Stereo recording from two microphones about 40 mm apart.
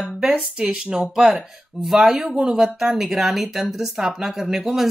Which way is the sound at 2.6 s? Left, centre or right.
Centre.